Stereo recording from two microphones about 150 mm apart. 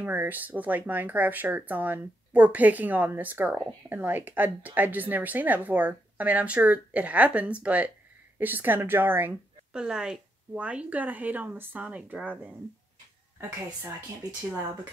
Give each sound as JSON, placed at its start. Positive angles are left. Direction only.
{"t": 0.0, "sound": "speech", "side_deg": -10}